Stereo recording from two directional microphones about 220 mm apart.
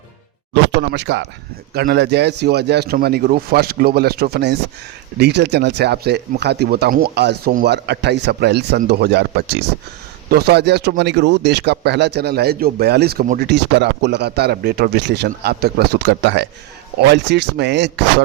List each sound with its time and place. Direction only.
0.5 s speech: 50° right (ahead or behind)